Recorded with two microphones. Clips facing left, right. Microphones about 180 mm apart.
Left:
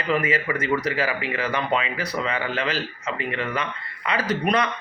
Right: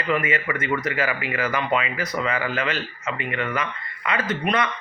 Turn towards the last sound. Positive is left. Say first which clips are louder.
# left 1 dB
turn(degrees=35)  # may be behind; listen again after turning